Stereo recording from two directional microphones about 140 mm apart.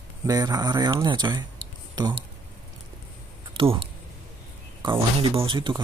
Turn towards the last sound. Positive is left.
turn(degrees=-35)  # may be behind; listen again after turning